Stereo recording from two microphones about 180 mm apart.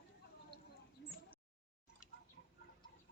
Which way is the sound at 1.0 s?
75° left (ahead or behind).